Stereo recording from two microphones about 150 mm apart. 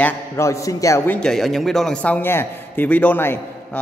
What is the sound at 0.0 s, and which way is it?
A man's voice, 20° left (ahead or behind).